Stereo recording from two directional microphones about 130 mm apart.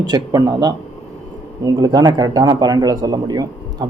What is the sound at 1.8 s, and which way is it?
Speech, 30° right (ahead or behind).